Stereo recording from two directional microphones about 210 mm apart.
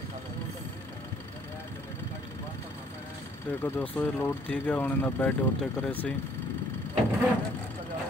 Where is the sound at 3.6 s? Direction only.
10° left (ahead or behind).